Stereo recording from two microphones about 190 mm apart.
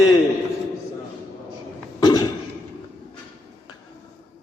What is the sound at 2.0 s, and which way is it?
Cough, 20° left (ahead or behind).